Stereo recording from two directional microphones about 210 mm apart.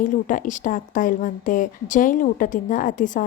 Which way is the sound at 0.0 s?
40° left (ahead or behind).